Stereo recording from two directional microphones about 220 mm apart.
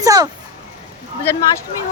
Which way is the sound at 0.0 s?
15° right (ahead or behind).